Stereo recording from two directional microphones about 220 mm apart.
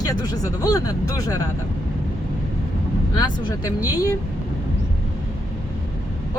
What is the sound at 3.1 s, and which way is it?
Speech, 15° left (ahead or behind).